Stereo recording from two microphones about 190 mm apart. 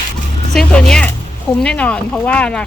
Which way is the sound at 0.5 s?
5° left (ahead or behind).